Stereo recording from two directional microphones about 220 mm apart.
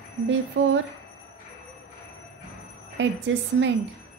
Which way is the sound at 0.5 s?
55° right (ahead or behind).